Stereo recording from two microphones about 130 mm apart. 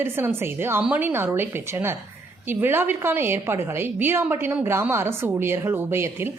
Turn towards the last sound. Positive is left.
turn(degrees=-20)  # may be behind; listen again after turning